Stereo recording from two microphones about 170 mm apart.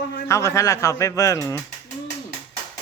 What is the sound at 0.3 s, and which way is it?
Speech, 15° left (ahead or behind).